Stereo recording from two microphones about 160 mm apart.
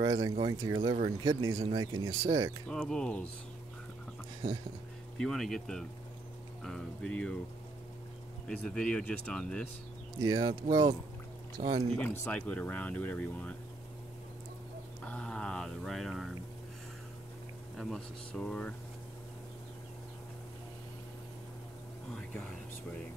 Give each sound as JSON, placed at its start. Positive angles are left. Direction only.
{"t": 0.0, "sound": "speech", "side_deg": -25}
{"t": 2.7, "sound": "speech", "side_deg": 5}
{"t": 5.1, "sound": "speech", "side_deg": 0}
{"t": 8.5, "sound": "speech", "side_deg": 5}
{"t": 10.2, "sound": "speech", "side_deg": -25}
{"t": 11.6, "sound": "speech", "side_deg": -40}
{"t": 11.9, "sound": "speech", "side_deg": 10}
{"t": 15.0, "sound": "a sound", "side_deg": 5}
{"t": 17.7, "sound": "speech", "side_deg": 0}
{"t": 22.1, "sound": "a sound", "side_deg": 5}